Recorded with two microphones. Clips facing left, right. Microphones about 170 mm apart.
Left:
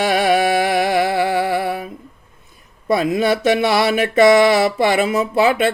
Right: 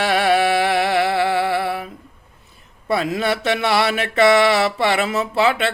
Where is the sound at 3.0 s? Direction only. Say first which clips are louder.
Left 4 dB; 15° left (ahead or behind).